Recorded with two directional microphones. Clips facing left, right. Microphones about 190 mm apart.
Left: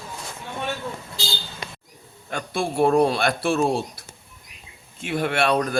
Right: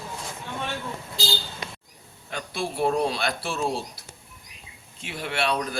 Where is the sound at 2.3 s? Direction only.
50° left (ahead or behind).